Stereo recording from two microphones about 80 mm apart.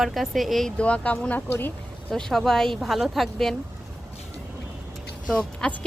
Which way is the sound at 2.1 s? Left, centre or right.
Centre.